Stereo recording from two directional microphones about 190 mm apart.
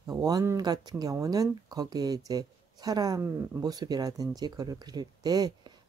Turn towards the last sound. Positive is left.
turn(degrees=-20)  # may be behind; listen again after turning